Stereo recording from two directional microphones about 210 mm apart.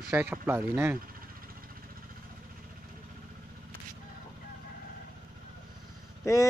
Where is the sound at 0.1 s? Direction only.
10° right (ahead or behind).